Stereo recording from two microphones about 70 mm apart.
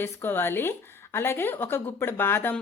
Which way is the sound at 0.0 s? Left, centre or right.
Left.